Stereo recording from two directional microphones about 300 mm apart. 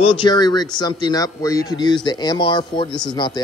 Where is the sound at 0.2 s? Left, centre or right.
Centre.